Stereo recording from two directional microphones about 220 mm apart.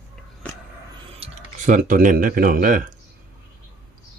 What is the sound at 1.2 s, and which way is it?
Speech, 30° right (ahead or behind).